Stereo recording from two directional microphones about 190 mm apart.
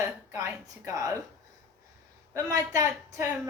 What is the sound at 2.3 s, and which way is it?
Speech, 15° right (ahead or behind).